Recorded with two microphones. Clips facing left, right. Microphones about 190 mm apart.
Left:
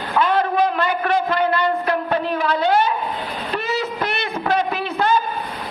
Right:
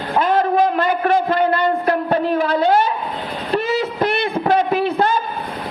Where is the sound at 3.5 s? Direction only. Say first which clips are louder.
Right 5 dB; 35° right (ahead or behind).